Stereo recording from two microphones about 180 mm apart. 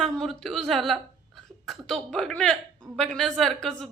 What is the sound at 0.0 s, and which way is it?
A woman's voice, centre (ahead or behind).